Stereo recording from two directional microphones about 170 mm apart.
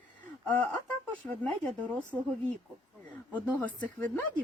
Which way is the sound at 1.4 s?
5° left (ahead or behind).